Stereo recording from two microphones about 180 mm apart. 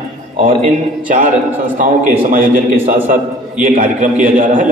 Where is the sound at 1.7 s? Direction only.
50° right (ahead or behind).